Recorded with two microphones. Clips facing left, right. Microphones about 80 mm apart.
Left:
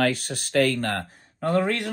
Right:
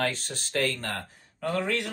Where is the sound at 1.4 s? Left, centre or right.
Left.